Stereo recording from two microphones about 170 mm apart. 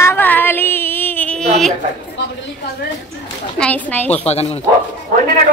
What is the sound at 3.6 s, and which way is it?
Speech, 10° left (ahead or behind).